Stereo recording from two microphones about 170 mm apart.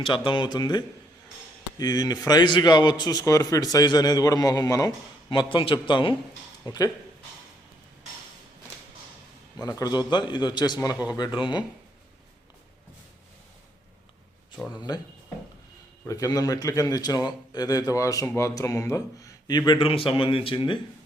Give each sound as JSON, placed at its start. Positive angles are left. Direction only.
{"t": 0.3, "sound": "a man's voice", "side_deg": 25}
{"t": 9.6, "sound": "a man's voice", "side_deg": 20}
{"t": 14.7, "sound": "a man's voice", "side_deg": 25}
{"t": 16.0, "sound": "a man's voice", "side_deg": 20}